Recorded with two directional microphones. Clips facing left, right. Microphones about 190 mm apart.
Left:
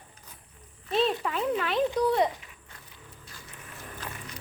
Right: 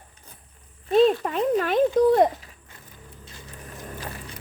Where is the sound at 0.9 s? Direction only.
45° right (ahead or behind).